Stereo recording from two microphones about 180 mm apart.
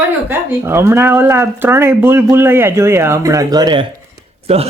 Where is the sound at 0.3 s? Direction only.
15° right (ahead or behind).